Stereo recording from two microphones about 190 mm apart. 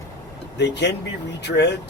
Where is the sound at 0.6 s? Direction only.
65° left (ahead or behind).